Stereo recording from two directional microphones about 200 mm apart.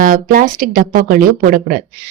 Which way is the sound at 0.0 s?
40° right (ahead or behind).